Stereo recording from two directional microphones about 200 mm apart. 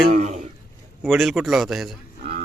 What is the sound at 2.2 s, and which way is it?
Cattle, 40° right (ahead or behind).